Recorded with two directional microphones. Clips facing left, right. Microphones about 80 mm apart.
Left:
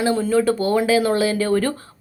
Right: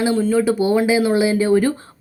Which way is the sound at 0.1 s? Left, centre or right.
Centre.